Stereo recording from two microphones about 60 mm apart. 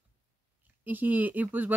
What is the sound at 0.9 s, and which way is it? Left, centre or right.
Speech, right.